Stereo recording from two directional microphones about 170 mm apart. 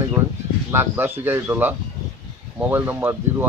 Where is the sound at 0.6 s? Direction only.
15° right (ahead or behind).